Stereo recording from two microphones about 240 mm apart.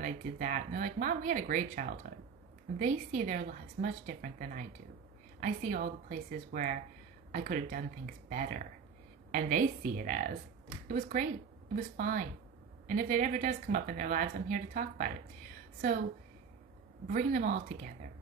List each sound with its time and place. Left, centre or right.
0.0 s speech: right
17.1 s speech: right